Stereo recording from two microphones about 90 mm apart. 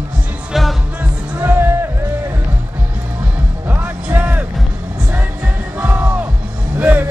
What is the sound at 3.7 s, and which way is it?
Music, 20° right (ahead or behind).